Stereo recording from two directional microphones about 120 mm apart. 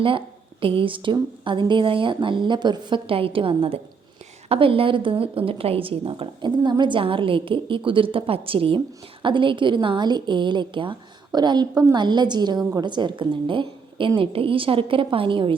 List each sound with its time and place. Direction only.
0.6 s a woman's voice: 45° right (ahead or behind)
6.6 s a woman's voice: 40° right (ahead or behind)